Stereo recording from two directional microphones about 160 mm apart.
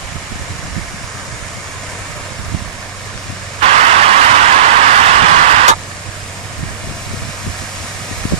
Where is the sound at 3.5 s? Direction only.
45° right (ahead or behind).